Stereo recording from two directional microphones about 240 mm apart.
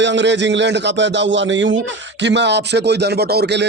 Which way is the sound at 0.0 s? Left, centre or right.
Right.